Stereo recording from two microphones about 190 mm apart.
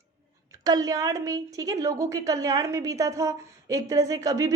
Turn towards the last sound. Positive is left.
turn(degrees=-20)  # may be behind; listen again after turning